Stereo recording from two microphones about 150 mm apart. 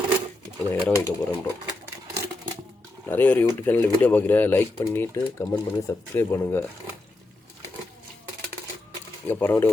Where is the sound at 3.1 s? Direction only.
15° left (ahead or behind).